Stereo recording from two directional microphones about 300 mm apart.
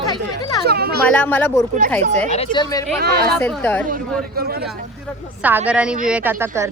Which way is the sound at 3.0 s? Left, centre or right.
Right.